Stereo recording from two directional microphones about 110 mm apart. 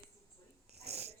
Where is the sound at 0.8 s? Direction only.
75° right (ahead or behind).